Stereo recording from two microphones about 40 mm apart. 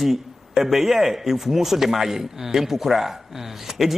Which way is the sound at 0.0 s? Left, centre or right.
Centre.